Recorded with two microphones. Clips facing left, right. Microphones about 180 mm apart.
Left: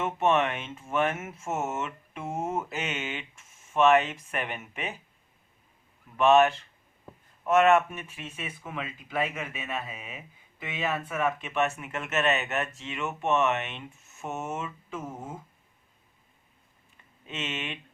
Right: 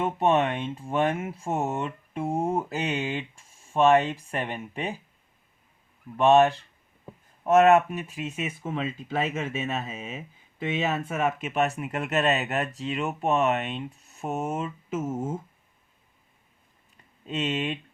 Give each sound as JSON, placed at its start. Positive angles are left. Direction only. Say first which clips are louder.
{"t": 0.0, "sound": "speech", "louder": "right 2 dB", "side_deg": -35}
{"t": 6.1, "sound": "speech", "louder": "right 2 dB", "side_deg": -30}
{"t": 8.6, "sound": "speech", "louder": "right 6 dB", "side_deg": -25}
{"t": 11.4, "sound": "speech", "louder": "right 3 dB", "side_deg": -35}
{"t": 17.2, "sound": "speech", "louder": "right 7 dB", "side_deg": -35}